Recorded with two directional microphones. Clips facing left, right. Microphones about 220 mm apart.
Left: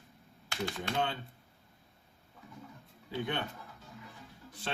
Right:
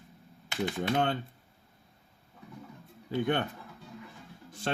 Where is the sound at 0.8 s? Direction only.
50° right (ahead or behind).